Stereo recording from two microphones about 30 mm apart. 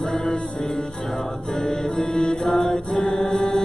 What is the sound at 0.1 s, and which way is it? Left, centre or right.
Music, left.